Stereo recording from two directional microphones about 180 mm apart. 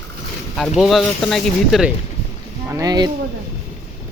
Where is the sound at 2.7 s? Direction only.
20° right (ahead or behind).